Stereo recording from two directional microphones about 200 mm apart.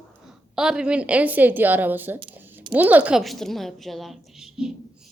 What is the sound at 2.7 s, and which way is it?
A woman's voice, 10° right (ahead or behind).